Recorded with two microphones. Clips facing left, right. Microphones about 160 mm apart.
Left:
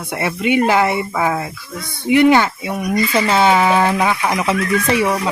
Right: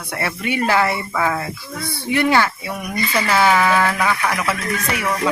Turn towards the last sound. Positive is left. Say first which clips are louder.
# left 6 dB
turn(degrees=30)  # may be behind; listen again after turning